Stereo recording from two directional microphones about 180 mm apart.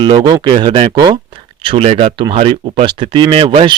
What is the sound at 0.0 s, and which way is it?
Speech, 25° right (ahead or behind).